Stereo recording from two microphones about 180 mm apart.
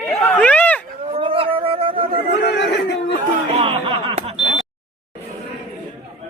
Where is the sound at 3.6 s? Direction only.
30° right (ahead or behind).